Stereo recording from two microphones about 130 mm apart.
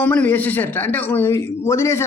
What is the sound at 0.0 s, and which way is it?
A man's voice, 15° left (ahead or behind).